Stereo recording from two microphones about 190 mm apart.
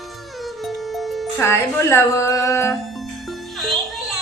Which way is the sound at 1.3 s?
15° left (ahead or behind).